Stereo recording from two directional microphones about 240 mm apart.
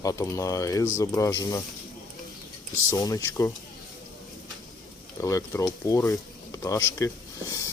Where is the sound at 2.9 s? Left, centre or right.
Centre.